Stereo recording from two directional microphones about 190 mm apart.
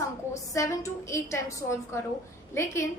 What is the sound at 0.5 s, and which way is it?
A woman's voice, 15° left (ahead or behind).